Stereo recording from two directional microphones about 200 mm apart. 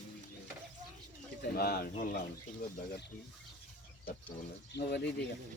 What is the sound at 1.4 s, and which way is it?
Speech, 50° left (ahead or behind).